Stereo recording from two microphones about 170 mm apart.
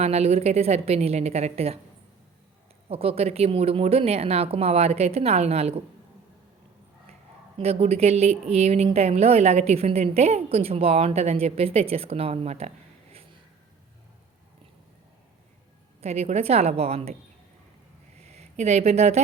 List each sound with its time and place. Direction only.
0.0 s a woman's voice: 40° right (ahead or behind)
2.9 s a woman's voice: 35° right (ahead or behind)
7.6 s a woman's voice: 35° right (ahead or behind)
16.0 s a woman's voice: 35° right (ahead or behind)
18.2 s a sound: 40° right (ahead or behind)